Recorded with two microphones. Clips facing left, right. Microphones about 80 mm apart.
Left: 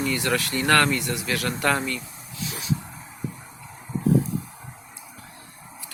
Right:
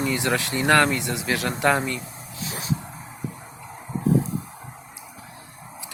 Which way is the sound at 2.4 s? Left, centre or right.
Right.